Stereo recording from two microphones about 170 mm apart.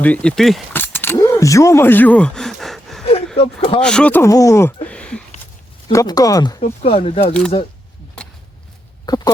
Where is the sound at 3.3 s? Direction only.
35° left (ahead or behind).